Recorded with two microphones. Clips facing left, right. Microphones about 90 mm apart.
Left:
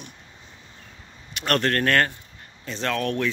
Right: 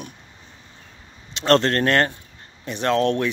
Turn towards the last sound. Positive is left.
turn(degrees=-20)  # may be behind; listen again after turning